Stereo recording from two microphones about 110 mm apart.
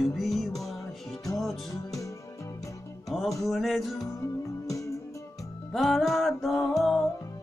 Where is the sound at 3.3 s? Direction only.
Centre (ahead or behind).